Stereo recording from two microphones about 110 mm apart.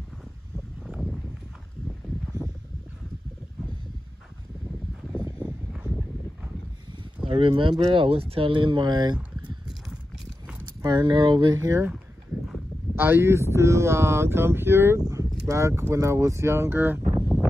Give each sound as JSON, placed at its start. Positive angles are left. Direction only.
{"t": 0.8, "sound": "a sound", "side_deg": 0}
{"t": 7.2, "sound": "speech", "side_deg": -50}
{"t": 9.7, "sound": "clip-clop", "side_deg": -5}
{"t": 10.8, "sound": "speech", "side_deg": -40}
{"t": 12.9, "sound": "speech", "side_deg": -20}